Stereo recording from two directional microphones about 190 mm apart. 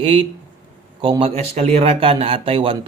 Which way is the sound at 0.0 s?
30° right (ahead or behind).